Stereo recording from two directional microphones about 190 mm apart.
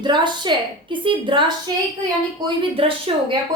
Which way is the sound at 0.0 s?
25° right (ahead or behind).